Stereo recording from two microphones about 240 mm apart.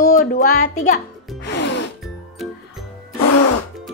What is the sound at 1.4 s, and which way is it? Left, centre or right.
Music, left.